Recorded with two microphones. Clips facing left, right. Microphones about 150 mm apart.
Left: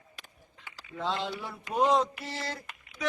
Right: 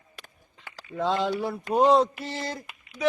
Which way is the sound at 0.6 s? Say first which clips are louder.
Right 6 dB; 45° right (ahead or behind).